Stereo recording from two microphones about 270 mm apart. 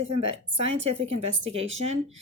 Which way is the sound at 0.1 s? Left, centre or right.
Right.